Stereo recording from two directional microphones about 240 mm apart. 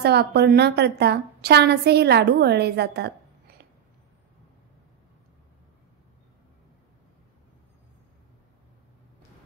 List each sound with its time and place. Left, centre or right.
0.0 s a woman's voice: right